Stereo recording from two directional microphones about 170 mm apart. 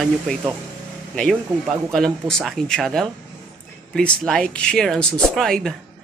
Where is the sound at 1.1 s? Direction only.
Centre (ahead or behind).